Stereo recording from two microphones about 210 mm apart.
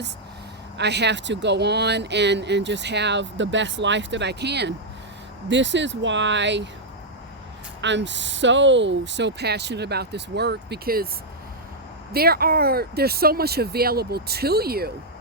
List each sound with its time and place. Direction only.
0.8 s speech: 55° right (ahead or behind)
7.8 s speech: 60° right (ahead or behind)
12.1 s speech: 45° right (ahead or behind)